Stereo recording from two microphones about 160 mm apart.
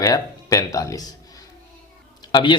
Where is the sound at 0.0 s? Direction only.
20° left (ahead or behind).